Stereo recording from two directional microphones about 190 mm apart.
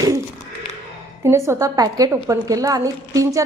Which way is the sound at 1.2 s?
15° right (ahead or behind).